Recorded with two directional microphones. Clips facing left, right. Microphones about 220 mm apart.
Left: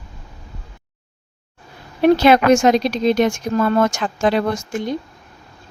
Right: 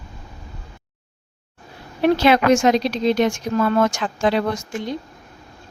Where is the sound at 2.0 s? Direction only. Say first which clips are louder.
Left 3 dB; 45° left (ahead or behind).